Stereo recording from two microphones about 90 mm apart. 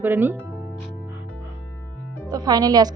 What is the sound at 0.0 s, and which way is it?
Speech, 25° right (ahead or behind).